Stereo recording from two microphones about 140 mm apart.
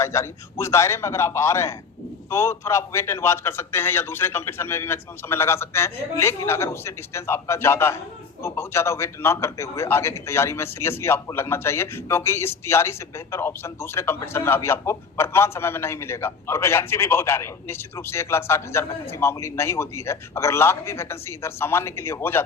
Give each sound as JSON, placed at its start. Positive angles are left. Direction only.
{"t": 0.0, "sound": "a man's voice", "side_deg": 20}